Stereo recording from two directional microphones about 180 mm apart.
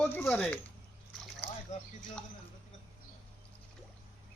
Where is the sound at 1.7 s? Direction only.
40° left (ahead or behind).